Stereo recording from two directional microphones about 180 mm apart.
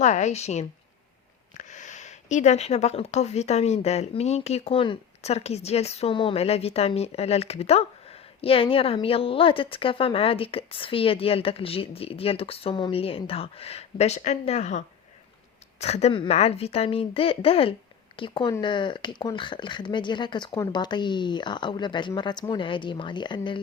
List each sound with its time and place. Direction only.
0.0 s speech: 40° left (ahead or behind); by 23.6 s 25° left (ahead or behind)